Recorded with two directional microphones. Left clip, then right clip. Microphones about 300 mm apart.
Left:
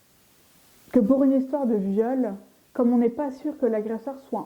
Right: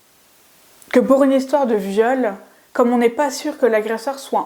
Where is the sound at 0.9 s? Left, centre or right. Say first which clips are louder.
Right 7 dB; centre.